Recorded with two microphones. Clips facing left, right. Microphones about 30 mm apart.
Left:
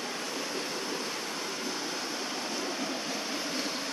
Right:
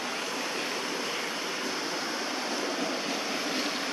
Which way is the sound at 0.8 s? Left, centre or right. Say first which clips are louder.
Right 3 dB; right.